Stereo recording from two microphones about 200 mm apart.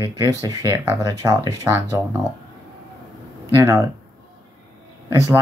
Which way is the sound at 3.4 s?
10° right (ahead or behind).